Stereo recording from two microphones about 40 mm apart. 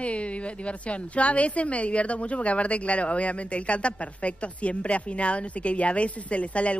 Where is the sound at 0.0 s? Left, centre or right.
Left.